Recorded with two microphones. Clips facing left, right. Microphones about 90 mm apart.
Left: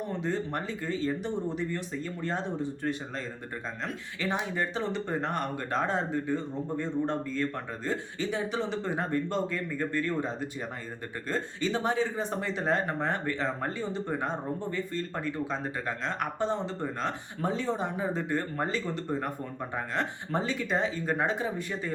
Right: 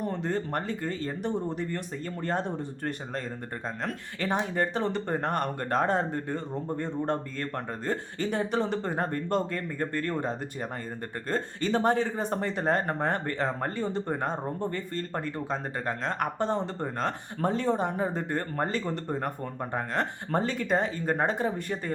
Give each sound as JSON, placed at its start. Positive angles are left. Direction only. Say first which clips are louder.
{"t": 0.0, "sound": "speech", "louder": "right 1 dB", "side_deg": -50}
{"t": 4.4, "sound": "speech", "louder": "right 5 dB", "side_deg": -45}